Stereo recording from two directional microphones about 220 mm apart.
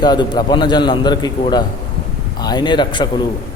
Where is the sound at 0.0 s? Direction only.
20° left (ahead or behind).